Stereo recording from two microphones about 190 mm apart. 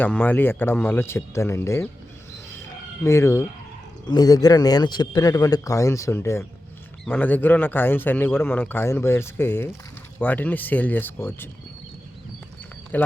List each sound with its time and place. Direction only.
0.0 s a man's voice: 10° left (ahead or behind)
3.0 s a man's voice: 15° left (ahead or behind)
12.9 s a man's voice: 10° left (ahead or behind)